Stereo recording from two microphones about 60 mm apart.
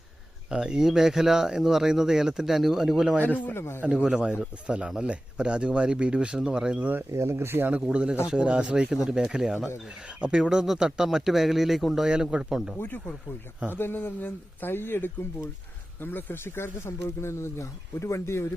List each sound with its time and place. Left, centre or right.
0.5 s speech: centre
3.2 s speech: left
3.5 s speech: left
3.8 s speech: centre
7.1 s speech: right
7.7 s speech: centre
10.2 s speech: centre
12.0 s speech: centre
12.8 s speech: left